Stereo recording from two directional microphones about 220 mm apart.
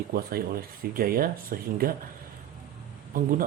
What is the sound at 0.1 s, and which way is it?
A man's voice, 40° right (ahead or behind).